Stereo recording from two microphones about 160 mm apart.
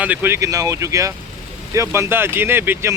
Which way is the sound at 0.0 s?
10° right (ahead or behind).